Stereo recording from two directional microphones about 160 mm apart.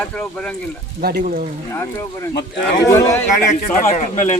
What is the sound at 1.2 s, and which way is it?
Speech, 55° right (ahead or behind).